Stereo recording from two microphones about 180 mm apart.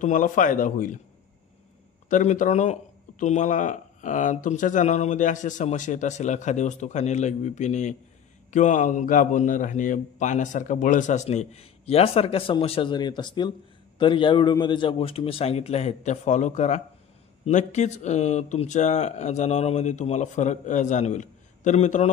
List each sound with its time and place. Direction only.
0.0 s a man's voice: 45° left (ahead or behind)
2.0 s a man's voice: 45° left (ahead or behind)